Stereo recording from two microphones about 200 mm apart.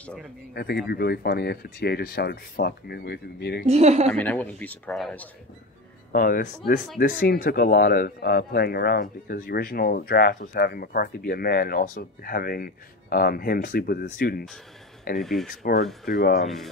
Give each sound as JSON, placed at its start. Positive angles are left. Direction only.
{"t": 0.0, "sound": "speech", "side_deg": 5}
{"t": 0.6, "sound": "speech", "side_deg": 55}
{"t": 3.6, "sound": "a woman's voice", "side_deg": -35}
{"t": 4.1, "sound": "speech", "side_deg": 10}
{"t": 6.1, "sound": "speech", "side_deg": 45}
{"t": 15.1, "sound": "speech", "side_deg": 0}
{"t": 15.4, "sound": "speech", "side_deg": 45}
{"t": 16.3, "sound": "speech", "side_deg": 0}